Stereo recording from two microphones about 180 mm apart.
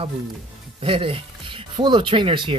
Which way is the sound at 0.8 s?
30° right (ahead or behind).